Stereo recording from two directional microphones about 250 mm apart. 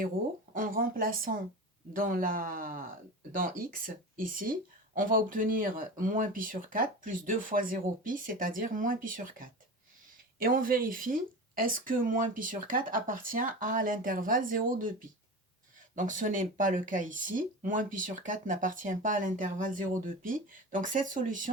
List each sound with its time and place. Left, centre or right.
0.5 s speech: right